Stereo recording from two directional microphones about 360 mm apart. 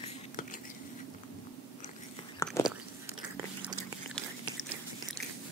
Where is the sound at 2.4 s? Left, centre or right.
Centre.